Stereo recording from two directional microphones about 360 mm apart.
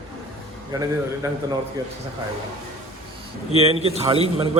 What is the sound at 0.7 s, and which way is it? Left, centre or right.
Speech, centre.